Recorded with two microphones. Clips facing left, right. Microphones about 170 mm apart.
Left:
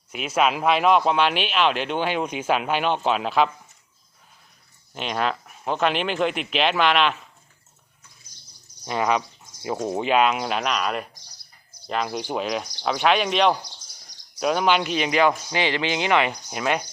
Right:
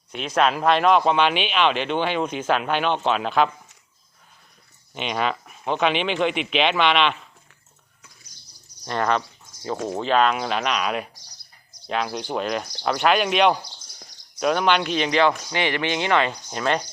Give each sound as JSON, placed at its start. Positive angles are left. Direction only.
{"t": 0.1, "sound": "speech", "side_deg": 5}
{"t": 4.9, "sound": "speech", "side_deg": 0}
{"t": 8.8, "sound": "speech", "side_deg": 5}